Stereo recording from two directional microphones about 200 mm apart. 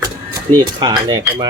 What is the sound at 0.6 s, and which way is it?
Speech, 20° right (ahead or behind).